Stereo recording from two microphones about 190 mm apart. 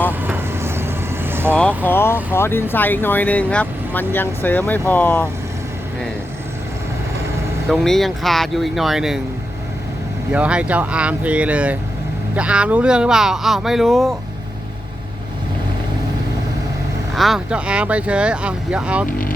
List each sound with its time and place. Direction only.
0.1 s vehicle: 10° right (ahead or behind)
1.5 s speech: 5° left (ahead or behind)
7.7 s speech: centre (ahead or behind)
10.3 s speech: 5° right (ahead or behind)
17.2 s speech: centre (ahead or behind)